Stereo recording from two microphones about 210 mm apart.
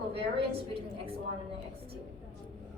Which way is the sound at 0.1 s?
25° right (ahead or behind).